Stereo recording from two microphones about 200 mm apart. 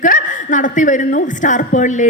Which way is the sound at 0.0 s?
40° left (ahead or behind).